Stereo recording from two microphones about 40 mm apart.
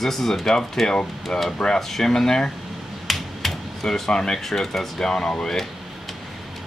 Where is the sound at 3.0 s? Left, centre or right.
Centre.